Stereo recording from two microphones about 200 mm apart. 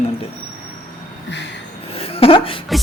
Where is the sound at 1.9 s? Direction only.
30° left (ahead or behind).